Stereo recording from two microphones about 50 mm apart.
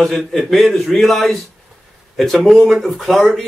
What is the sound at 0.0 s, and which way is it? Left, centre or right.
Speech, centre.